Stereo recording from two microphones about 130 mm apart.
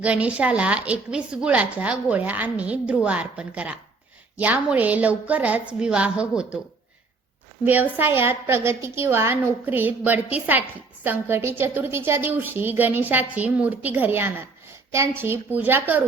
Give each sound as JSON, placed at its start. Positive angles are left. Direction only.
{"t": 0.0, "sound": "a woman's voice", "side_deg": -10}
{"t": 7.6, "sound": "a woman's voice", "side_deg": -15}